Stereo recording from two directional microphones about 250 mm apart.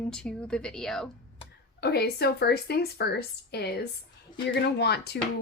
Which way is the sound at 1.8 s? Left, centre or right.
Left.